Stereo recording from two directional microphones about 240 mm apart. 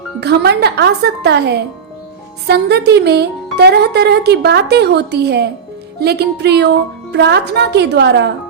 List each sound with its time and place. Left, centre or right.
0.2 s speech: right